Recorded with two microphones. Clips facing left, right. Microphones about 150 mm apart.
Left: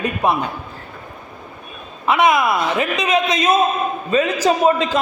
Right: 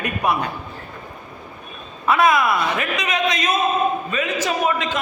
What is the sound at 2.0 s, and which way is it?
A man's voice, 20° left (ahead or behind).